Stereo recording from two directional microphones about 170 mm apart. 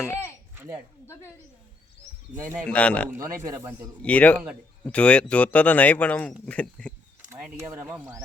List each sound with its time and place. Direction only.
0.0 s a sound: 15° left (ahead or behind)
1.0 s speech: 15° left (ahead or behind)
2.4 s speech: 15° right (ahead or behind)
2.6 s speech: 5° left (ahead or behind)
3.1 s speech: 20° right (ahead or behind)
4.0 s speech: 10° left (ahead or behind)
7.3 s speech: 10° right (ahead or behind)